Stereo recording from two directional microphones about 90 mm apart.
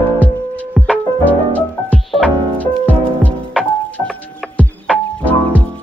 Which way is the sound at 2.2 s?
15° left (ahead or behind).